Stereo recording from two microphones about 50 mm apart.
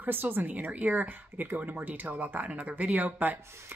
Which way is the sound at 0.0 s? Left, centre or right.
Right.